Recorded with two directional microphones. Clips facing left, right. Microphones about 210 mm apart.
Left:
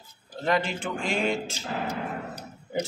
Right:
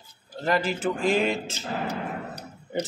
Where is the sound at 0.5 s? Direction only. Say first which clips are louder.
Right 2 dB; 5° right (ahead or behind).